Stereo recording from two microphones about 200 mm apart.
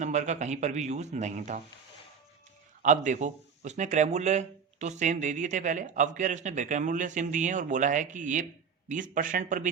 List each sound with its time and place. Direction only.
0.0 s speech: 35° right (ahead or behind)
2.8 s speech: 40° right (ahead or behind)